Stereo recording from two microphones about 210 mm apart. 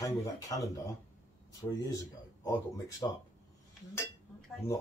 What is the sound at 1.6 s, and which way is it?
Speech, 15° left (ahead or behind).